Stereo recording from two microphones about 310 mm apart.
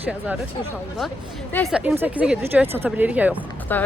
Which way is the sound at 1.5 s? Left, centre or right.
Centre.